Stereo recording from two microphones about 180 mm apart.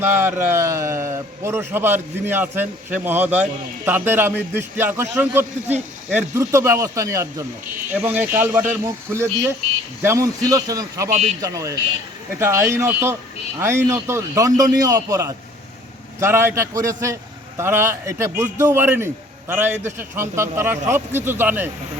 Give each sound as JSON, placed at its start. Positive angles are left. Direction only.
{"t": 0.0, "sound": "a man's voice", "side_deg": -10}